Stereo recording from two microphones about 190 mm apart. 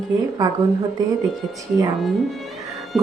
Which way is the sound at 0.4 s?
15° right (ahead or behind).